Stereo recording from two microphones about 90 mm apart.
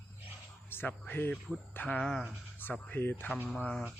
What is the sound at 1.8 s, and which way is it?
Speech, 10° left (ahead or behind).